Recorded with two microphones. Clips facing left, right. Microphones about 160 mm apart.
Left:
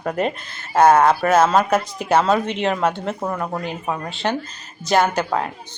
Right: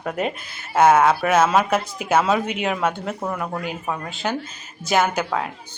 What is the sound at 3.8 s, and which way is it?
Speech, 15° left (ahead or behind).